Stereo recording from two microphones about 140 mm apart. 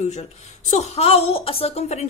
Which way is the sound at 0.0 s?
55° left (ahead or behind).